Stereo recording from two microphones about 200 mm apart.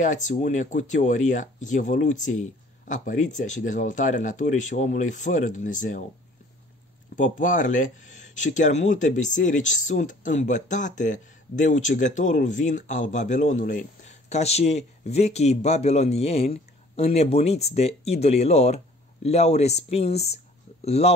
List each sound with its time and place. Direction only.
0.0 s speech: 40° left (ahead or behind)
7.2 s speech: 40° left (ahead or behind)